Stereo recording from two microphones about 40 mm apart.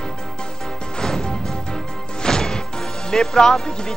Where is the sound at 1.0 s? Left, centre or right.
Centre.